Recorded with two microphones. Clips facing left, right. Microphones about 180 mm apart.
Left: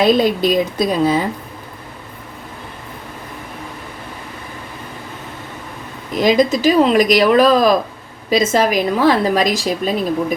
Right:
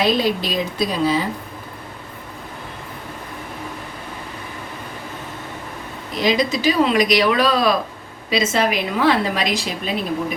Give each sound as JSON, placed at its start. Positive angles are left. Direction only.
{"t": 0.2, "sound": "a woman's voice", "side_deg": 50}
{"t": 6.1, "sound": "a woman's voice", "side_deg": 50}